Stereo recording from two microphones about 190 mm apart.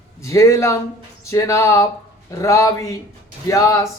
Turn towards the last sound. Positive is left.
turn(degrees=15)  # may be behind; listen again after turning